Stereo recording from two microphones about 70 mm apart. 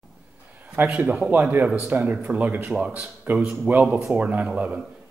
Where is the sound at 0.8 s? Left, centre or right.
Centre.